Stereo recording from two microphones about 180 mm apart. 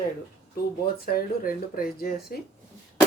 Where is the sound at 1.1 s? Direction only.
55° left (ahead or behind).